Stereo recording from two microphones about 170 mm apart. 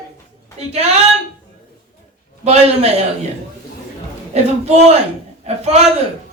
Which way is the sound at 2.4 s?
40° right (ahead or behind).